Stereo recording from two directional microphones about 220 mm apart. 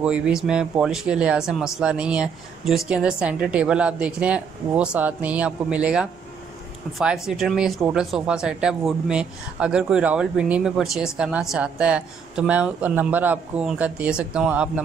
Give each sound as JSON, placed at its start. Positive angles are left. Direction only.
{"t": 0.0, "sound": "speech", "side_deg": -5}